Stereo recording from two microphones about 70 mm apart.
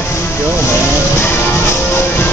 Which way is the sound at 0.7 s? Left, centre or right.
Left.